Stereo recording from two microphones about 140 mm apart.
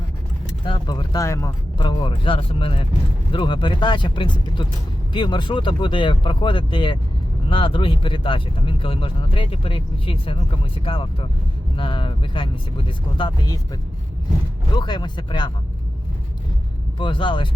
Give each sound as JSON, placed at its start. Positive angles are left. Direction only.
{"t": 0.6, "sound": "speech", "side_deg": 35}
{"t": 1.8, "sound": "speech", "side_deg": 30}
{"t": 14.8, "sound": "speech", "side_deg": 35}
{"t": 17.0, "sound": "speech", "side_deg": 35}